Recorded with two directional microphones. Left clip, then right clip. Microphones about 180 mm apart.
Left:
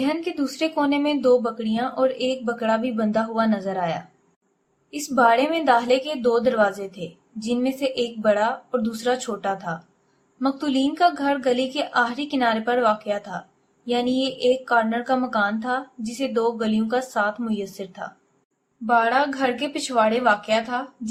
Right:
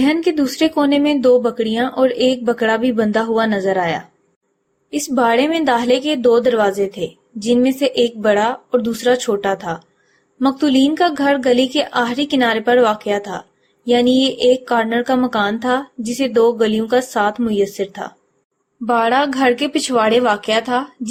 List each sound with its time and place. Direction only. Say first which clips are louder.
0.0 s speech: right 9 dB; 30° right (ahead or behind)